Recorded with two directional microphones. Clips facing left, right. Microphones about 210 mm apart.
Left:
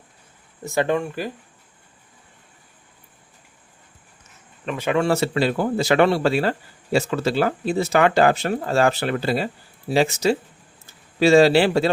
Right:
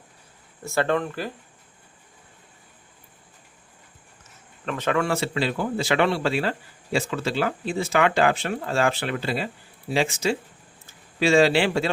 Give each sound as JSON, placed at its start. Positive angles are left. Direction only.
{"t": 0.6, "sound": "speech", "side_deg": 15}
{"t": 4.6, "sound": "speech", "side_deg": 10}
{"t": 4.9, "sound": "speech", "side_deg": 35}